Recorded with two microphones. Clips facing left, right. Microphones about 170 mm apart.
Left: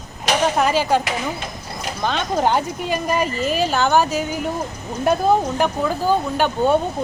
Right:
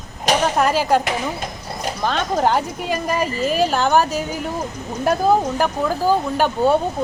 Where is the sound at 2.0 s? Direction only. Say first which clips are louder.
Right 1 dB; centre (ahead or behind).